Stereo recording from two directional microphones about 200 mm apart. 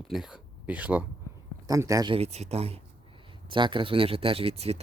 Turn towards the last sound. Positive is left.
turn(degrees=-30)  # may be behind; listen again after turning